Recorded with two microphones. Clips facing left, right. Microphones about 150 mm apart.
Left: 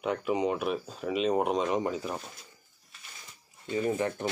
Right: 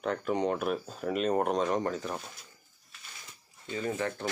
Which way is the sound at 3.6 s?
15° left (ahead or behind).